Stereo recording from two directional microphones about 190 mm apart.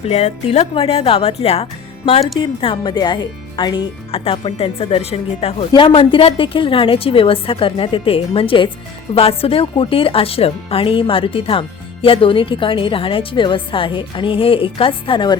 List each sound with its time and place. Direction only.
0.0 s speech: 35° left (ahead or behind)